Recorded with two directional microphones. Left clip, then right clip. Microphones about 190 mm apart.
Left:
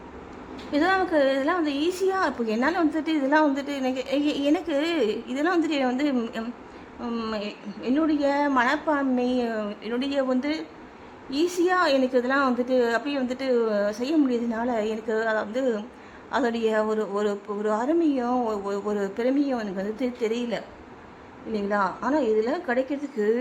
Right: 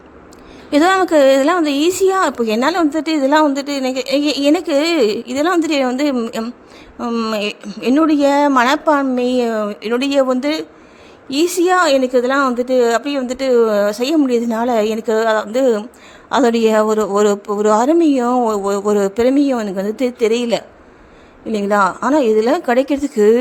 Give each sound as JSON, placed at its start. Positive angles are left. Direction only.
{"t": 0.7, "sound": "a woman's voice", "side_deg": -35}